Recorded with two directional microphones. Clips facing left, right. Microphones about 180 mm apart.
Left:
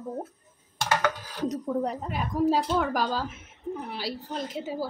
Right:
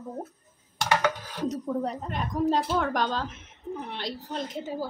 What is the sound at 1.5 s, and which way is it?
A woman's voice, 10° left (ahead or behind).